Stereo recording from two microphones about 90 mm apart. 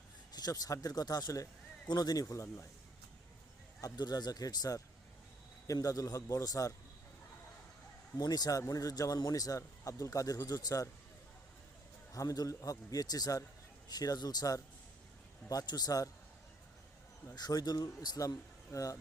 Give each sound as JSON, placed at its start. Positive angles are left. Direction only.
{"t": 0.3, "sound": "a man's voice", "side_deg": 45}
{"t": 3.8, "sound": "a man's voice", "side_deg": 45}
{"t": 8.1, "sound": "a man's voice", "side_deg": 45}
{"t": 12.1, "sound": "a man's voice", "side_deg": 40}
{"t": 17.3, "sound": "a man's voice", "side_deg": 45}
{"t": 18.7, "sound": "speech", "side_deg": 40}